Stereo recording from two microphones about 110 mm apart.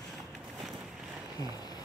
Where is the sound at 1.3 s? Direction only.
35° left (ahead or behind).